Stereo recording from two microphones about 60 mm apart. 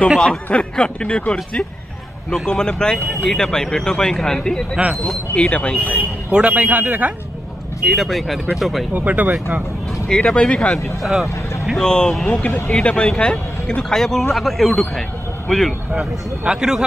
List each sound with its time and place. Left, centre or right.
0.5 s speech: centre
4.8 s speech: centre
5.3 s speech: centre
6.3 s a man's voice: right
7.8 s speech: centre
8.9 s a man's voice: right
10.0 s speech: centre
11.0 s speech: centre
11.7 s speech: centre
15.9 s speech: centre